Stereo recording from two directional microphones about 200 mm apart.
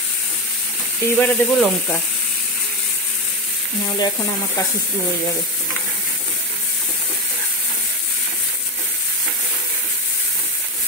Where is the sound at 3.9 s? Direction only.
20° left (ahead or behind).